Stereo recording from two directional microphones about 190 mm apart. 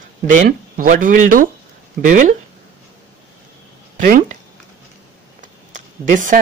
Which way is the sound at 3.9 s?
45° right (ahead or behind).